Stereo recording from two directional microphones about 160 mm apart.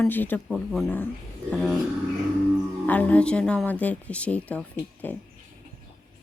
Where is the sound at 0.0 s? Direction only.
10° left (ahead or behind).